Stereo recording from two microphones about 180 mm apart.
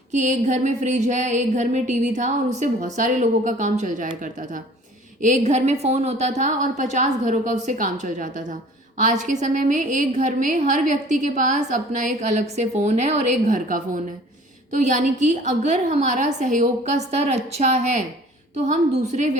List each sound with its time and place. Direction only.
0.1 s a woman's voice: 40° right (ahead or behind)